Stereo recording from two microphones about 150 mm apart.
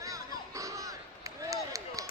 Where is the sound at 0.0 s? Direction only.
25° right (ahead or behind).